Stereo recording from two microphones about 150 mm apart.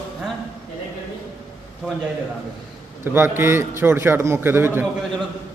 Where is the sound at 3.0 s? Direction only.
15° right (ahead or behind).